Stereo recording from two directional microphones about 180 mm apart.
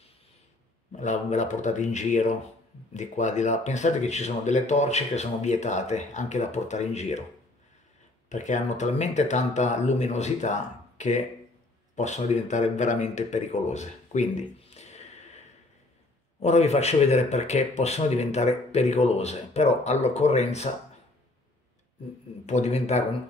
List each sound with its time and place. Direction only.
0.9 s speech: 40° left (ahead or behind)
8.3 s speech: 40° left (ahead or behind)
22.5 s speech: 40° left (ahead or behind)